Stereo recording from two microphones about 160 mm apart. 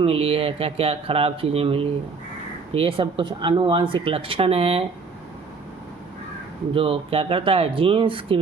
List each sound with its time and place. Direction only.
0.0 s speech: 35° right (ahead or behind)
6.7 s speech: 35° right (ahead or behind)